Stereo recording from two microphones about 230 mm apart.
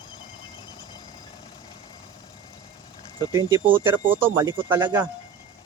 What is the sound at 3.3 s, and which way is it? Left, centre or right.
Speech, centre.